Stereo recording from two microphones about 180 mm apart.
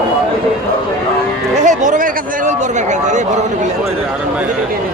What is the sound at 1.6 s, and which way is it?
Speech, 45° right (ahead or behind).